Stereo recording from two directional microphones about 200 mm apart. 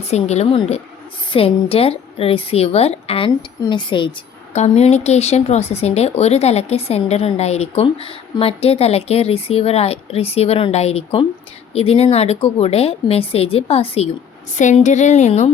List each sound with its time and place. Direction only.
0.0 s a woman's voice: 35° left (ahead or behind)